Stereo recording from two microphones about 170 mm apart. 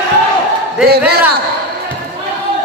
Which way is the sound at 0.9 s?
65° right (ahead or behind).